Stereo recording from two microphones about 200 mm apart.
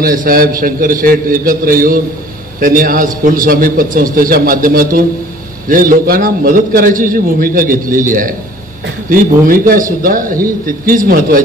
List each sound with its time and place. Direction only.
0.0 s a man's voice: 45° right (ahead or behind)